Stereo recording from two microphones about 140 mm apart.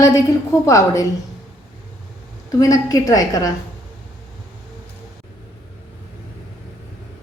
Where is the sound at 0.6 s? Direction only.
20° left (ahead or behind).